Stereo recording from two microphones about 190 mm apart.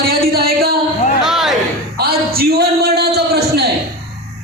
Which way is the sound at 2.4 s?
55° right (ahead or behind).